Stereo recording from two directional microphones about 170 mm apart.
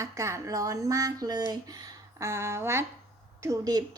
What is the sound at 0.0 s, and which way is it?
Speech, 20° right (ahead or behind).